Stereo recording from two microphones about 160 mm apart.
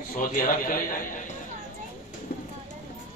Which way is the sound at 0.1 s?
60° left (ahead or behind).